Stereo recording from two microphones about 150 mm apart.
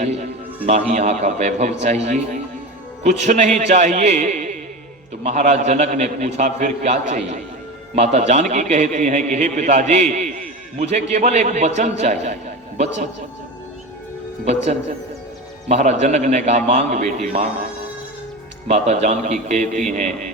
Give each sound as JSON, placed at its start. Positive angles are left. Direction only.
{"t": 0.0, "sound": "a man's voice", "side_deg": -50}
{"t": 15.7, "sound": "a man's voice", "side_deg": -50}
{"t": 18.7, "sound": "a man's voice", "side_deg": -45}